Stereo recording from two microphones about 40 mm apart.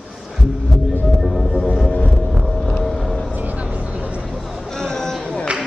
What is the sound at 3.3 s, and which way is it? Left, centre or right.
Vehicle, right.